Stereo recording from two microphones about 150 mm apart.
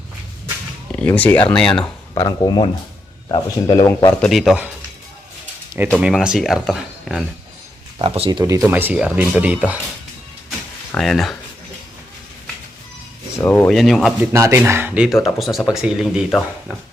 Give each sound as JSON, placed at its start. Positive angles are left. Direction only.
{"t": 0.9, "sound": "speech", "side_deg": 10}
{"t": 1.8, "sound": "speech", "side_deg": 25}
{"t": 4.2, "sound": "speech", "side_deg": 0}
{"t": 6.0, "sound": "speech", "side_deg": -5}
{"t": 7.9, "sound": "speech", "side_deg": -40}
{"t": 8.3, "sound": "speech", "side_deg": -25}
{"t": 8.6, "sound": "speech", "side_deg": -10}
{"t": 10.9, "sound": "speech", "side_deg": 0}
{"t": 13.4, "sound": "speech", "side_deg": 10}
{"t": 14.2, "sound": "speech", "side_deg": -15}